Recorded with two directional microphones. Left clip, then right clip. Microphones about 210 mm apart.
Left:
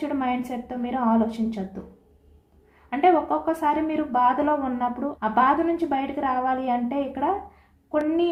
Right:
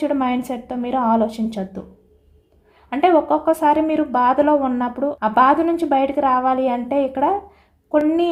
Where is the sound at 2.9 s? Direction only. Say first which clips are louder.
Right 5 dB; 50° right (ahead or behind).